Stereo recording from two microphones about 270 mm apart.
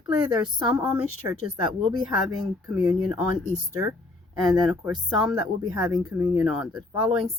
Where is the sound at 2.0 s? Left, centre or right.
Centre.